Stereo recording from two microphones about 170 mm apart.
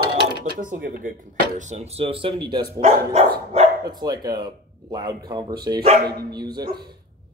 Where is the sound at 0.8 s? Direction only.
65° right (ahead or behind).